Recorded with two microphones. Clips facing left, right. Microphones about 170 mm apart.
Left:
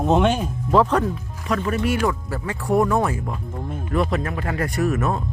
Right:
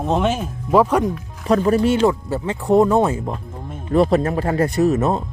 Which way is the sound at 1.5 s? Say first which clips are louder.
Right 7 dB; 35° right (ahead or behind).